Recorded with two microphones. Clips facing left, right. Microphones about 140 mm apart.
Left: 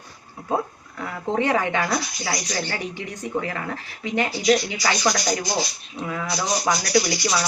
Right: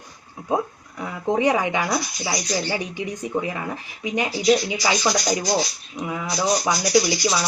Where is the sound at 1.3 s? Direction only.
15° right (ahead or behind).